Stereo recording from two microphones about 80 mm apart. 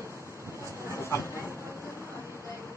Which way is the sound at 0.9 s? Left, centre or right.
Left.